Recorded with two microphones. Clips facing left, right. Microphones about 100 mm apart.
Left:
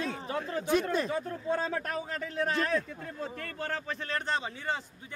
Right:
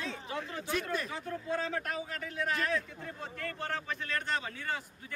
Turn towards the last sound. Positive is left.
turn(degrees=25)  # may be behind; listen again after turning